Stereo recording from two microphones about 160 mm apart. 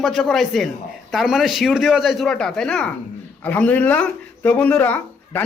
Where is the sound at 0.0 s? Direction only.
Centre (ahead or behind).